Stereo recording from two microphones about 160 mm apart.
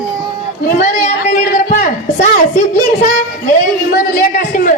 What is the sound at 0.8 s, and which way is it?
Speech, 45° left (ahead or behind).